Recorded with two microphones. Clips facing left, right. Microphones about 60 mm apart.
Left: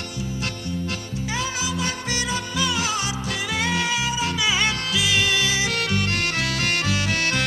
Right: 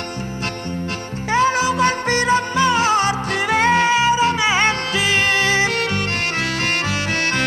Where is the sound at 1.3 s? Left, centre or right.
Right.